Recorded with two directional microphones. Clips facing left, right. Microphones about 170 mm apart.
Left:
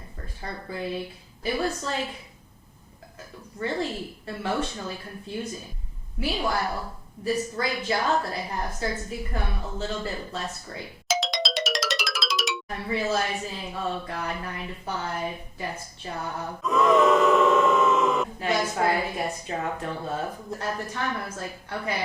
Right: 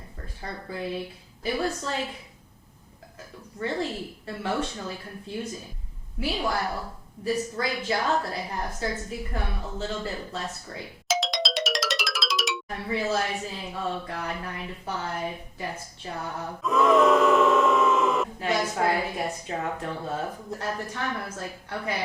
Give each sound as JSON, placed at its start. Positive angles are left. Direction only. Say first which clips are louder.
{"t": 0.4, "sound": "speech", "louder": "left 1 dB", "side_deg": 10}
{"t": 3.6, "sound": "speech", "louder": "left 1 dB", "side_deg": 10}
{"t": 6.2, "sound": "speech", "louder": "left 1 dB", "side_deg": 10}
{"t": 11.1, "sound": "music", "louder": "even", "side_deg": 0}
{"t": 12.7, "sound": "speech", "louder": "left 1 dB", "side_deg": 10}
{"t": 16.6, "sound": "speech", "louder": "even", "side_deg": 0}